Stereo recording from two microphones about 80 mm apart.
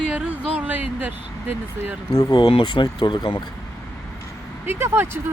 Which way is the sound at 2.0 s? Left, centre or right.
Left.